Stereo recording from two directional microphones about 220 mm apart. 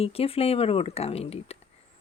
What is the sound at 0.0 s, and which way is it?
Speech, 25° left (ahead or behind).